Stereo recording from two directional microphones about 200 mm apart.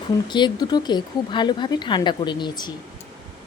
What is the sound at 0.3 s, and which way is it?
A woman's voice, 20° left (ahead or behind).